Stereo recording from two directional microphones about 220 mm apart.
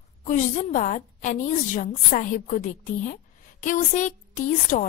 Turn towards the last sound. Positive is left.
turn(degrees=35)  # may be behind; listen again after turning